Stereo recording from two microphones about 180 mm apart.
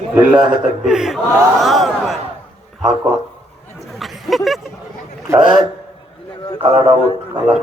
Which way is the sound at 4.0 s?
Centre (ahead or behind).